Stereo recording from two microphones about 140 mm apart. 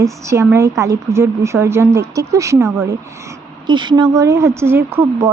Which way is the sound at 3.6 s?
35° right (ahead or behind).